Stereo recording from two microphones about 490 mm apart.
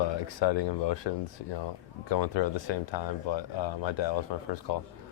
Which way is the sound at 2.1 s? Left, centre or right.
Left.